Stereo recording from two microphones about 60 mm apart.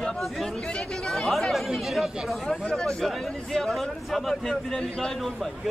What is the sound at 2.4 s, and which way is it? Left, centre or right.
Speech, centre.